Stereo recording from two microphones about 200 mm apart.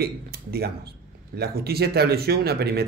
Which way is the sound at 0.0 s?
50° right (ahead or behind).